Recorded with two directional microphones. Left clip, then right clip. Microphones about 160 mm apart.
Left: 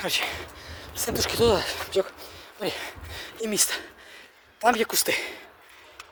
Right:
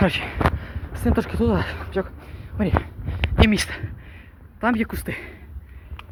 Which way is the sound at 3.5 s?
40° left (ahead or behind).